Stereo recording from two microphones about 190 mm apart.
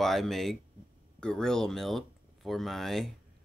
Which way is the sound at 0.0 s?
Centre (ahead or behind).